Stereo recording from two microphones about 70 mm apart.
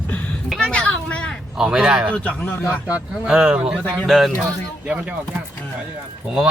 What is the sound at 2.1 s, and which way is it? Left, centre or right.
Speech, centre.